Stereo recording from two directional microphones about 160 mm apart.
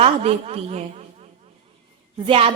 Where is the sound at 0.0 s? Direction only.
40° right (ahead or behind).